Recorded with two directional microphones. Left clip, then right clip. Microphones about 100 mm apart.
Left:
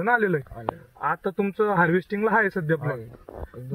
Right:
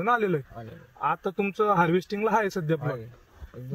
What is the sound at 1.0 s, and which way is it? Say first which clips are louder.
Speech: left 1 dB; 45° right (ahead or behind).